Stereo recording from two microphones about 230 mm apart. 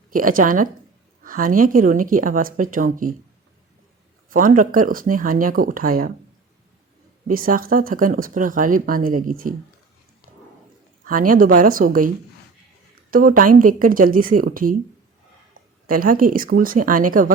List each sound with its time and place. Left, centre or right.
0.1 s speech: right
4.3 s speech: right
7.3 s speech: right
11.0 s a woman's voice: right
15.9 s speech: right